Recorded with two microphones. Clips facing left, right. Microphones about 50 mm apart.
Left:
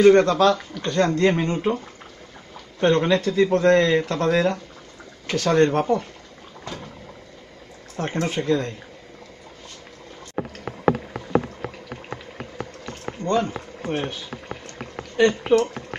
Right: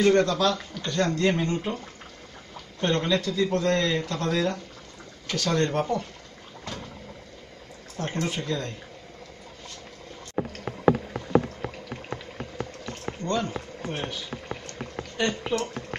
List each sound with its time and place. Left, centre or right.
0.0 s speech: left
2.8 s speech: left
8.0 s speech: left
13.2 s speech: left